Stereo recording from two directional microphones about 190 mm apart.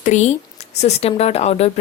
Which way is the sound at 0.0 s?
40° left (ahead or behind).